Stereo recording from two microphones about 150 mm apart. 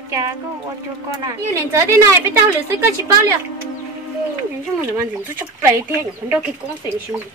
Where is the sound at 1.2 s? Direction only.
20° right (ahead or behind).